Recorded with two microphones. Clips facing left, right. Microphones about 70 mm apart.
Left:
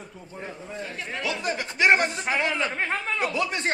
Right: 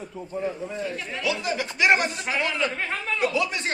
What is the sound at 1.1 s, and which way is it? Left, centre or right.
A man's voice, left.